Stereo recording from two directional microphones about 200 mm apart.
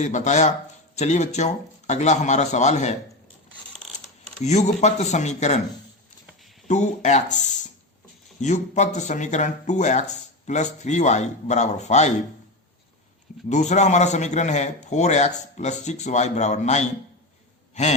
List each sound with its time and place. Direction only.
0.0 s speech: 35° left (ahead or behind)
4.4 s speech: 35° left (ahead or behind)
6.7 s speech: 35° left (ahead or behind)
13.5 s speech: 35° left (ahead or behind)